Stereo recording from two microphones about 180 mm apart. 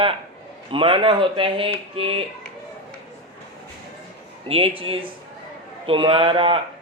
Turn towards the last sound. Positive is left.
turn(degrees=-30)  # may be behind; listen again after turning